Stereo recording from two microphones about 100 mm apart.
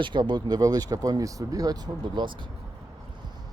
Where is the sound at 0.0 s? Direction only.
50° right (ahead or behind).